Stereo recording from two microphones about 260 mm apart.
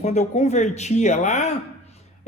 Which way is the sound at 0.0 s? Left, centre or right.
Left.